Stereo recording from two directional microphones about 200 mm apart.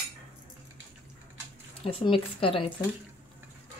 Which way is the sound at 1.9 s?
25° left (ahead or behind).